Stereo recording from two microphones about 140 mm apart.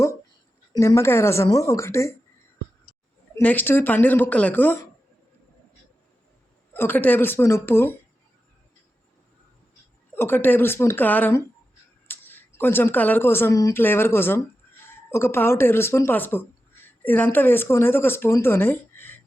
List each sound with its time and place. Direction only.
0.7 s speech: 20° left (ahead or behind)
3.3 s speech: 15° left (ahead or behind)
6.7 s speech: 15° left (ahead or behind)
10.2 s speech: 15° left (ahead or behind)
12.0 s a sound: 15° left (ahead or behind)
12.5 s speech: 15° left (ahead or behind)